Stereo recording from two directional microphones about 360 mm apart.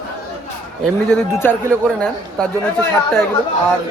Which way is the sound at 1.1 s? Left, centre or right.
Centre.